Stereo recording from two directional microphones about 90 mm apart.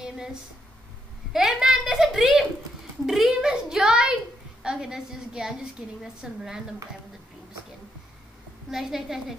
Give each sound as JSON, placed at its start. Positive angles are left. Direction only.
{"t": 0.0, "sound": "a sound", "side_deg": -5}
{"t": 1.3, "sound": "a child's voice", "side_deg": -5}
{"t": 8.6, "sound": "a child's voice", "side_deg": -5}